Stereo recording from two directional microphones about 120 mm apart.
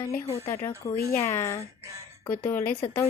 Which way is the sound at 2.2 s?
15° left (ahead or behind).